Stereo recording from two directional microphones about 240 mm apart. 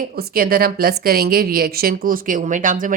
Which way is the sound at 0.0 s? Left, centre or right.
Right.